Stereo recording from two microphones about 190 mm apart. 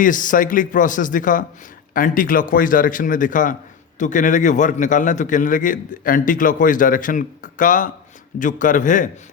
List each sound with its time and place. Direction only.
0.0 s a man's voice: 45° left (ahead or behind)